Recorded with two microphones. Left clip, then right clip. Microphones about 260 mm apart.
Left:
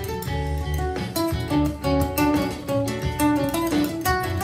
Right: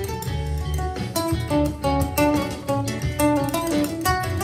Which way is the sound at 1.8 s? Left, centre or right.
Right.